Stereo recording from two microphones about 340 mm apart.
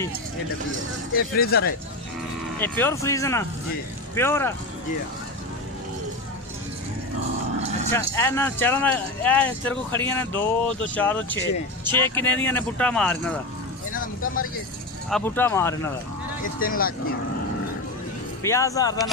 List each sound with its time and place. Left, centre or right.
1.1 s speech: left
2.6 s speech: centre
7.9 s speech: centre
13.9 s vehicle: left
15.0 s speech: centre
16.4 s speech: left
18.4 s speech: centre